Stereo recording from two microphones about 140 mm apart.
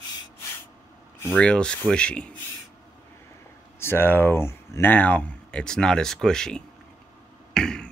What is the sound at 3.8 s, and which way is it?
Speech, 15° left (ahead or behind).